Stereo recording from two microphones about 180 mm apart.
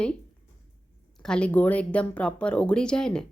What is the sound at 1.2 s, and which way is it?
A woman's voice, 5° left (ahead or behind).